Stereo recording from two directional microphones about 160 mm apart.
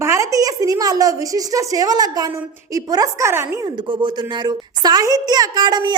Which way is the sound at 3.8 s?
30° right (ahead or behind).